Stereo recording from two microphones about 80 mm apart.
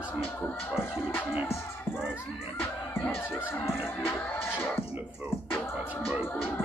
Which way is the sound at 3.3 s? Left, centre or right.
Left.